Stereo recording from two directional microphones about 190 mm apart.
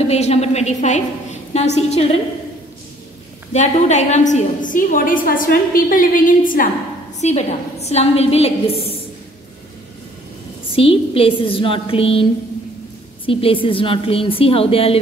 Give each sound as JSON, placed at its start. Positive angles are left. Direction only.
{"t": 0.0, "sound": "a woman's voice", "side_deg": 35}
{"t": 3.5, "sound": "a woman's voice", "side_deg": 40}
{"t": 10.7, "sound": "a woman's voice", "side_deg": 30}